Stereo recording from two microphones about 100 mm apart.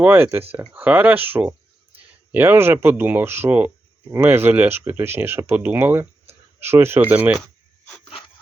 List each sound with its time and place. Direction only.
0.0 s speech: 20° right (ahead or behind)